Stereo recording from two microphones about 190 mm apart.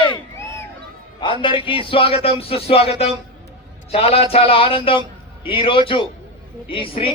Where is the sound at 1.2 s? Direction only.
25° left (ahead or behind).